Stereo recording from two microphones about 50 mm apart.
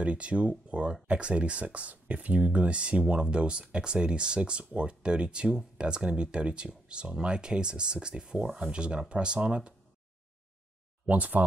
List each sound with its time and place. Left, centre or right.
0.0 s speech: right
11.1 s speech: right